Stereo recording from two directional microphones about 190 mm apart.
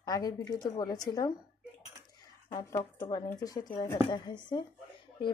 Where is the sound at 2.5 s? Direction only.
15° left (ahead or behind).